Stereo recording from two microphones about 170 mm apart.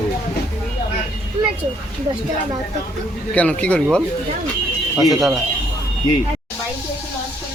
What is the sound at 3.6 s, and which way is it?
Speech, 5° left (ahead or behind).